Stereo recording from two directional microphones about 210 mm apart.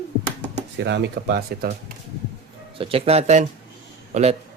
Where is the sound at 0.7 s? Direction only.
55° right (ahead or behind).